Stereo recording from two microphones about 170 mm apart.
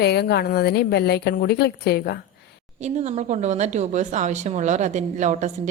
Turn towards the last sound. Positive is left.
turn(degrees=-45)  # may be behind; listen again after turning